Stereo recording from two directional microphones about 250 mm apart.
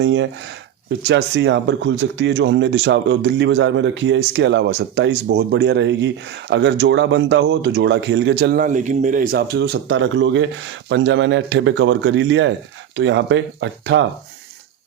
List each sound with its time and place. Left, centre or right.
0.0 s speech: right